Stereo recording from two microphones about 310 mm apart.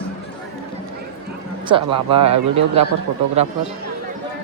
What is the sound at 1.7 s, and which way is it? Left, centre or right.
Speech, centre.